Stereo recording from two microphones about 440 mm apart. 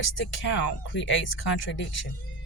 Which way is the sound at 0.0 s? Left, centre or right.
Left.